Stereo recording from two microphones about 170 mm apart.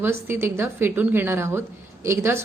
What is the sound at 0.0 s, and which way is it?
Speech, 15° right (ahead or behind).